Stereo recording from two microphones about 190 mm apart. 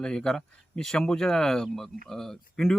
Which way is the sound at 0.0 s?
5° left (ahead or behind).